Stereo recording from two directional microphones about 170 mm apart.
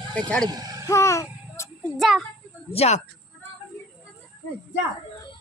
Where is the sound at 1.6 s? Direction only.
15° left (ahead or behind).